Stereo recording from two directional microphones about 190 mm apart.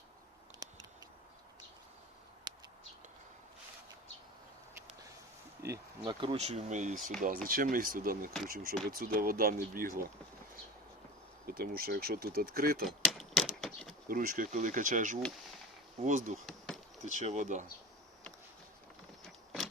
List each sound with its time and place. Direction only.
0.6 s a sound: 20° right (ahead or behind)
2.5 s a sound: 25° right (ahead or behind)
5.6 s speech: 20° right (ahead or behind); by 10.1 s 50° right (ahead or behind)
11.4 s speech: 50° right (ahead or behind)
12.8 s typewriter: centre (ahead or behind)
14.1 s speech: 50° right (ahead or behind)
16.5 s bee: centre (ahead or behind)
17.0 s speech: 40° right (ahead or behind)